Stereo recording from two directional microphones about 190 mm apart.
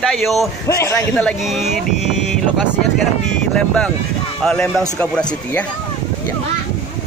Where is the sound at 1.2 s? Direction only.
Centre (ahead or behind).